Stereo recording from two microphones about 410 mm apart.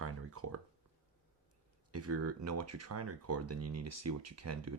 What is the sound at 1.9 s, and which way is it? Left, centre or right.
Speech, right.